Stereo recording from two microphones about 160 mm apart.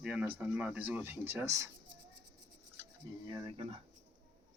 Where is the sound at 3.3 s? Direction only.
30° right (ahead or behind).